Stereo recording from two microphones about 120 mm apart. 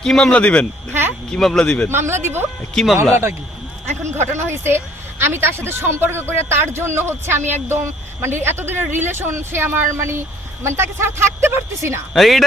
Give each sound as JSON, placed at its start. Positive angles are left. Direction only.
{"t": 0.0, "sound": "speech", "side_deg": 5}
{"t": 1.9, "sound": "a woman's voice", "side_deg": -20}
{"t": 2.8, "sound": "speech", "side_deg": 5}
{"t": 4.0, "sound": "a woman's voice", "side_deg": -20}
{"t": 12.1, "sound": "speech", "side_deg": 0}